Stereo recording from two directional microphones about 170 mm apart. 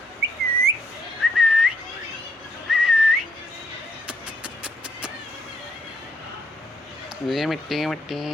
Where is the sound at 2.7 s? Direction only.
Centre (ahead or behind).